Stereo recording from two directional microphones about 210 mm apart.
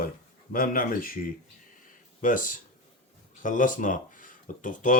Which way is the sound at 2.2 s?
40° left (ahead or behind).